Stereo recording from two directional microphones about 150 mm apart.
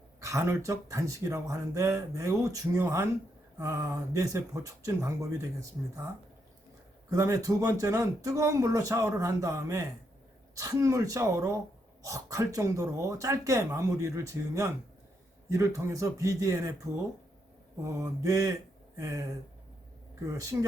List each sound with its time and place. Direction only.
0.2 s speech: 20° right (ahead or behind)
7.1 s speech: 20° right (ahead or behind)
20.2 s speech: 20° right (ahead or behind)